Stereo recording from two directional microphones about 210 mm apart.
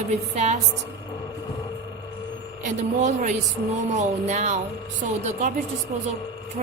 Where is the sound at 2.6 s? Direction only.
35° right (ahead or behind).